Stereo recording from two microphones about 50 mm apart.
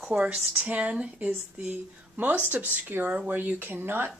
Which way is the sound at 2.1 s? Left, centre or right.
Right.